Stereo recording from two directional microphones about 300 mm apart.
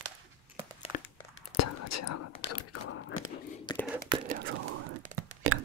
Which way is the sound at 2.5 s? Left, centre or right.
Left.